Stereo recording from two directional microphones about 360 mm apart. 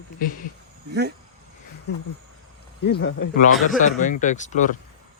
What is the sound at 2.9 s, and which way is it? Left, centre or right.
Speech, left.